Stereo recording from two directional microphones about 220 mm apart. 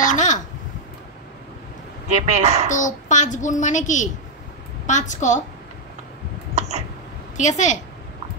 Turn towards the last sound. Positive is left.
turn(degrees=35)  # may be behind; listen again after turning